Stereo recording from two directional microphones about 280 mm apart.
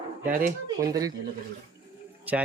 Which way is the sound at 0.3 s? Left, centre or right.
Right.